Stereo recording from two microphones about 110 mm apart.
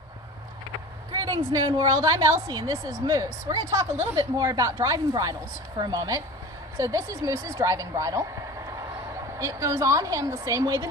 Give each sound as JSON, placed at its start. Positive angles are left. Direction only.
{"t": 1.1, "sound": "a woman's voice", "side_deg": -35}
{"t": 9.4, "sound": "a woman's voice", "side_deg": -30}